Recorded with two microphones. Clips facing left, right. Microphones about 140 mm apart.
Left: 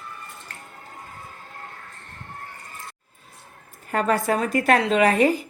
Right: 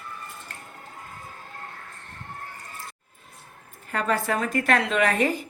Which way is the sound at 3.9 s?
45° left (ahead or behind).